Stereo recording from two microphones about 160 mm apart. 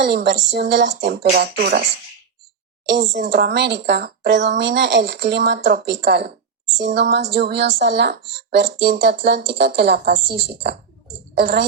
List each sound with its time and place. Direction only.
0.0 s speech: 90° right
3.2 s a woman's voice: 85° right